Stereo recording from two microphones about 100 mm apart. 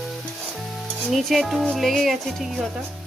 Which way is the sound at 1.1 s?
Centre (ahead or behind).